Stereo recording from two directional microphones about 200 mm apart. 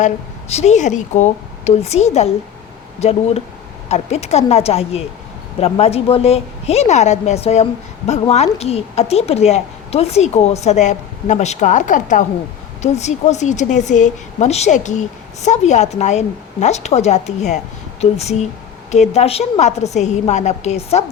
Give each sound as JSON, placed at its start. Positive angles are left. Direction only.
{"t": 0.0, "sound": "a woman's voice", "side_deg": 35}